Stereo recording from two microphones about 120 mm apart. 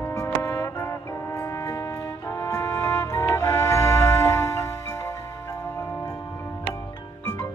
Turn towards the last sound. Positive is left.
turn(degrees=20)  # may be behind; listen again after turning